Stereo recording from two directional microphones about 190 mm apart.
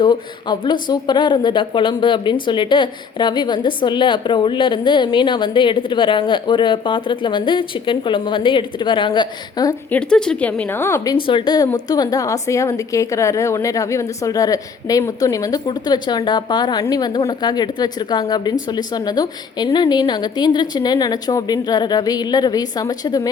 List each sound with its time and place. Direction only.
0.0 s speech: 25° left (ahead or behind)
9.9 s speech: 5° left (ahead or behind)